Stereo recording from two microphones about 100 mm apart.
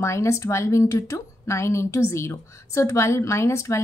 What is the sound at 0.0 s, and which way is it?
A woman's voice, 30° left (ahead or behind).